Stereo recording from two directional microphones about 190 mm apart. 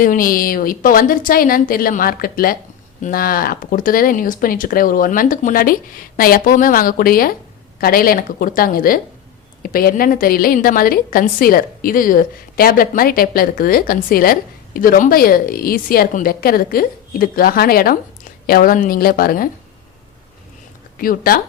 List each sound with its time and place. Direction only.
0.0 s a woman's voice: 50° left (ahead or behind)
21.0 s a woman's voice: 50° left (ahead or behind)